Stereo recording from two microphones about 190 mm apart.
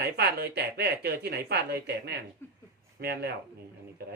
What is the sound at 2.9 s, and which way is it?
Speech, 55° right (ahead or behind).